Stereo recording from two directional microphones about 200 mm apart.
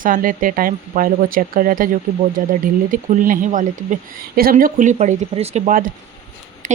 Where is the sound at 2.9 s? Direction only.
40° right (ahead or behind).